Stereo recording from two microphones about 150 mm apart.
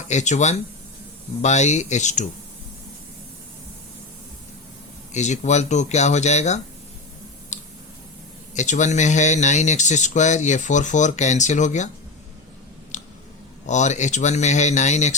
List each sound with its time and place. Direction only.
0.1 s speech: 50° left (ahead or behind)
5.1 s speech: 50° left (ahead or behind)
7.5 s a sound: 55° left (ahead or behind)
8.5 s speech: 55° left (ahead or behind)
12.9 s a sound: 55° left (ahead or behind)
13.7 s speech: 50° left (ahead or behind)